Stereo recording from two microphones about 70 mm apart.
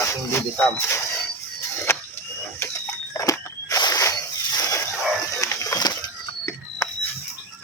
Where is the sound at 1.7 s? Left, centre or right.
Left.